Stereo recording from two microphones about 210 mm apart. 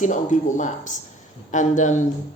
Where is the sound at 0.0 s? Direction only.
35° left (ahead or behind).